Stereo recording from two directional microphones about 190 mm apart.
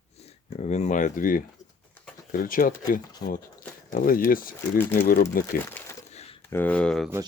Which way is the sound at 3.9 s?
45° left (ahead or behind).